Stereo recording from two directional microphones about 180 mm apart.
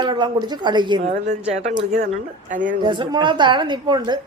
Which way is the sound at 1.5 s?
35° right (ahead or behind).